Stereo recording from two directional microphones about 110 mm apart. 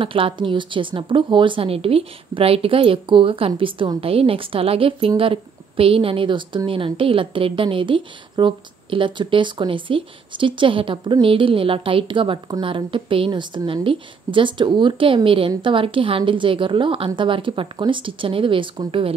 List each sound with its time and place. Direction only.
0.0 s a woman's voice: 55° right (ahead or behind)